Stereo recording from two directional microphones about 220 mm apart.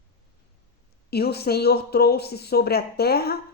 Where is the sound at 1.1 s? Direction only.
45° left (ahead or behind).